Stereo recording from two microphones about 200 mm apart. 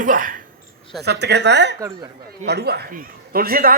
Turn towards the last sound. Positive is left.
turn(degrees=-50)  # may be behind; listen again after turning